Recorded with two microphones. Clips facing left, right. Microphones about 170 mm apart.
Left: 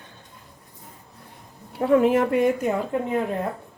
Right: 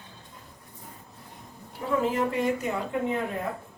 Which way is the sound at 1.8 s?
65° left (ahead or behind).